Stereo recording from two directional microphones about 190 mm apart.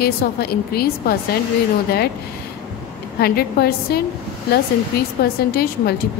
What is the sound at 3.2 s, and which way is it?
Speech, 55° left (ahead or behind).